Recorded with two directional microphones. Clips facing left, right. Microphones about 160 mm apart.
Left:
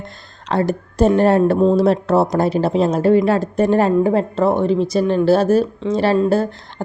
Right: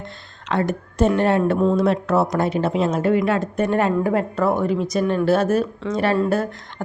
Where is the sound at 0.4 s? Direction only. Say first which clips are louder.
Left 3 dB; 35° left (ahead or behind).